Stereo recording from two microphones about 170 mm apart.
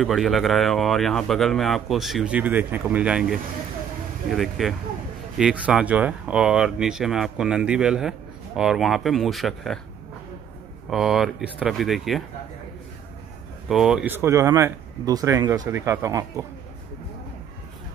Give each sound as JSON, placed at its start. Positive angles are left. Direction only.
{"t": 0.0, "sound": "speech", "side_deg": 0}
{"t": 4.4, "sound": "speech", "side_deg": 0}
{"t": 10.9, "sound": "speech", "side_deg": 0}
{"t": 13.7, "sound": "speech", "side_deg": 0}